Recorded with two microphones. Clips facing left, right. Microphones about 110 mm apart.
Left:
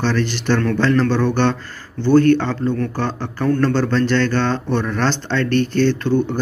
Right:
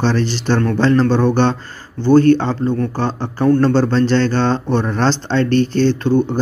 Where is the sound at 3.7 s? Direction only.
35° right (ahead or behind).